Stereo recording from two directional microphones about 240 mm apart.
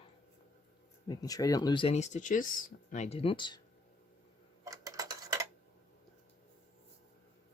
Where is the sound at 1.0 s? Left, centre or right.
Centre.